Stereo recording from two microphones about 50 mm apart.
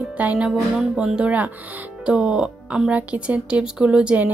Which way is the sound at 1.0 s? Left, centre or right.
Centre.